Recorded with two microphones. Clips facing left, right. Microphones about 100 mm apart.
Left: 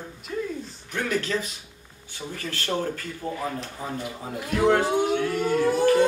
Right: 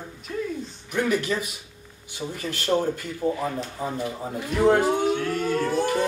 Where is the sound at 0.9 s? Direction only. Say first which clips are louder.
Right 3 dB; 10° right (ahead or behind).